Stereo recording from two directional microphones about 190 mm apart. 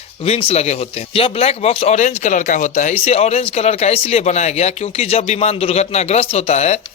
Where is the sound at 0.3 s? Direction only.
30° left (ahead or behind).